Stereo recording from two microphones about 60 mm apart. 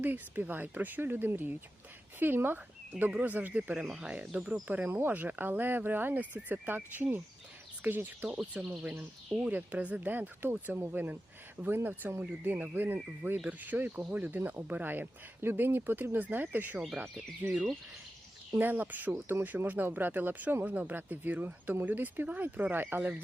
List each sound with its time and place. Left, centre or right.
0.0 s speech: right; by 4.5 s centre
4.9 s speech: right
18.6 s speech: right